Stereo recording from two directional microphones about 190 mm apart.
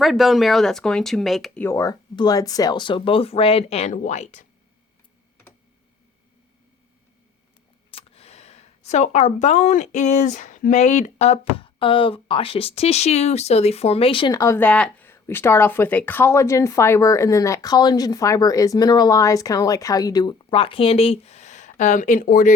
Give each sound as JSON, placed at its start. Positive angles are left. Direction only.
{"t": 0.0, "sound": "speech", "side_deg": 0}
{"t": 1.6, "sound": "speech", "side_deg": 15}
{"t": 7.9, "sound": "speech", "side_deg": 30}